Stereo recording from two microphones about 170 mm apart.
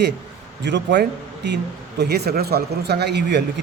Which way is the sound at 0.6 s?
90° right.